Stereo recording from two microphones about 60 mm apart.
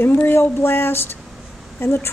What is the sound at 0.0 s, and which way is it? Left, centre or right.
A woman's voice, left.